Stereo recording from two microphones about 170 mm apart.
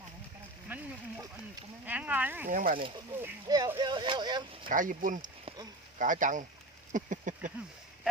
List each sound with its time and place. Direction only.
0.7 s a sound: 10° right (ahead or behind)
1.9 s speech: 10° right (ahead or behind)
2.5 s speech: 50° right (ahead or behind)
3.4 s speech: 25° right (ahead or behind)
4.7 s speech: 50° right (ahead or behind)
6.9 s a sound: 50° right (ahead or behind)